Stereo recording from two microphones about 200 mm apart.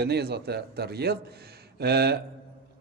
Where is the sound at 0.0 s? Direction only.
55° right (ahead or behind).